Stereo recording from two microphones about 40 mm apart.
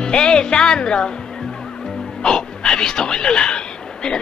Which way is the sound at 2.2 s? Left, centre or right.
Centre.